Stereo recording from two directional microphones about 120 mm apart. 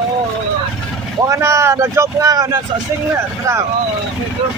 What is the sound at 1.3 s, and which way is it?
Speech, 25° right (ahead or behind).